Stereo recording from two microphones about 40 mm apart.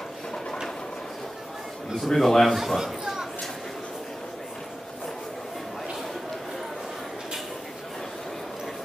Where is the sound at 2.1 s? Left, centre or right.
Centre.